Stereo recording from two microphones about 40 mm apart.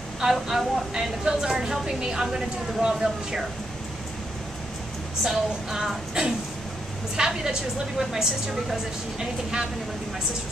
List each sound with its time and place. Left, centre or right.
0.2 s a woman's voice: centre
5.2 s a woman's voice: centre